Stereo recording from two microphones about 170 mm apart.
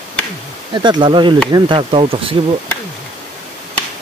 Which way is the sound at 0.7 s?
25° right (ahead or behind).